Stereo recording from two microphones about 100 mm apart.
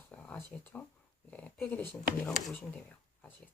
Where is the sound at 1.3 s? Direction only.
15° left (ahead or behind).